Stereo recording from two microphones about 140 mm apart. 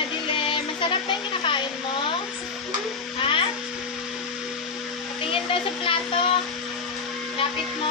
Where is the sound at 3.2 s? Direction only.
35° left (ahead or behind).